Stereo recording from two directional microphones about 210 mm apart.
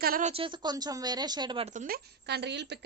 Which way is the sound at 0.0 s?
45° right (ahead or behind).